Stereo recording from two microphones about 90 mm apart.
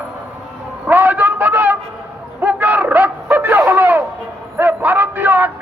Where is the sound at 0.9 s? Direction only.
20° right (ahead or behind).